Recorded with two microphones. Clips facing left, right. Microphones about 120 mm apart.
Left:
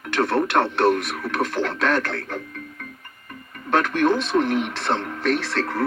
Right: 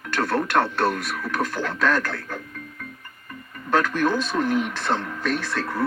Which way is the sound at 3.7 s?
20° left (ahead or behind).